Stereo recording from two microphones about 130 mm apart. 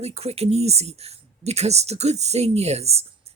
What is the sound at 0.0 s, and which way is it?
Speech, 55° right (ahead or behind).